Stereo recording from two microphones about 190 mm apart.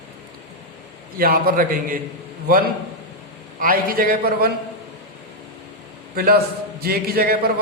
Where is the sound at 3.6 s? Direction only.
50° right (ahead or behind).